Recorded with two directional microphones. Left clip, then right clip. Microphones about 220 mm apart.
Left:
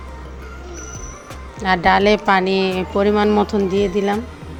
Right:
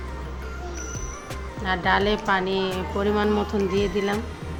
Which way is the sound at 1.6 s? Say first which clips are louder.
Left 8 dB; 35° left (ahead or behind).